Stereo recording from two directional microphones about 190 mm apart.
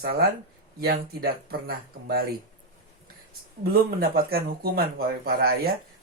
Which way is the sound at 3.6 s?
50° right (ahead or behind).